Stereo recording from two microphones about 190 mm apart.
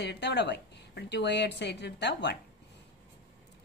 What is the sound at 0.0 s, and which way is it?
A woman's voice, 60° left (ahead or behind).